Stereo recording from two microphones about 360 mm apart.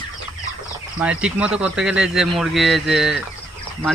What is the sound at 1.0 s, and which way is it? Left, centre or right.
Speech, centre.